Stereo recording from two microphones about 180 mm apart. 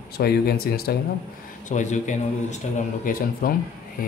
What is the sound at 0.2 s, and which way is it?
Speech, 60° left (ahead or behind).